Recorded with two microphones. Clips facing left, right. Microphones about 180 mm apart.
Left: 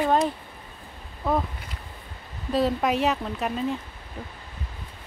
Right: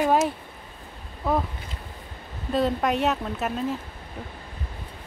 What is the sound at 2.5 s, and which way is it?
Speech, centre (ahead or behind).